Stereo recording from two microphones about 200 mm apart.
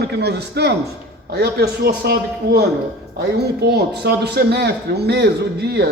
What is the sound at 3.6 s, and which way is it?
A man's voice, 55° right (ahead or behind).